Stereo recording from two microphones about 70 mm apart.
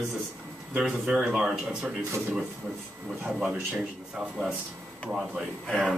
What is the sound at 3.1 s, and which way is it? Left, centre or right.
A man's voice, centre.